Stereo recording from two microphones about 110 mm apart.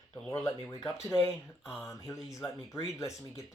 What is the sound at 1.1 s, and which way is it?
Speech, 5° right (ahead or behind).